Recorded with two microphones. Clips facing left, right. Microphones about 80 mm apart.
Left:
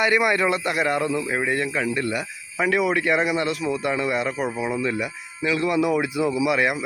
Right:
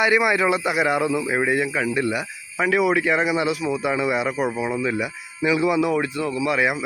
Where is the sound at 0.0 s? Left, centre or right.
Centre.